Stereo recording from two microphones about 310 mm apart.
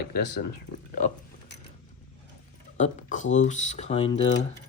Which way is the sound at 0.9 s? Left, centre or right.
Left.